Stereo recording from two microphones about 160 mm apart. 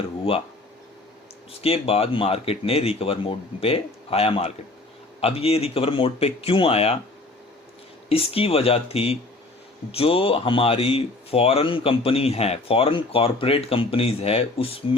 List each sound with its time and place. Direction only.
1.6 s speech: 40° left (ahead or behind)
8.1 s speech: 35° left (ahead or behind)